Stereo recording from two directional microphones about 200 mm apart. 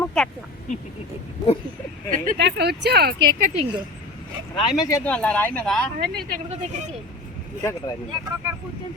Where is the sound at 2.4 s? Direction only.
55° right (ahead or behind).